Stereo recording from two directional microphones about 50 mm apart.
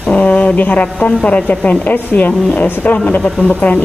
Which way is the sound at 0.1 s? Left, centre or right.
Left.